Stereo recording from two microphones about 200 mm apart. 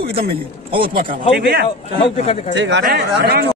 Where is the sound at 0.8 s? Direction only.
50° right (ahead or behind).